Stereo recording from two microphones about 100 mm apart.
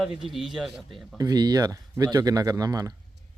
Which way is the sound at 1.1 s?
40° right (ahead or behind).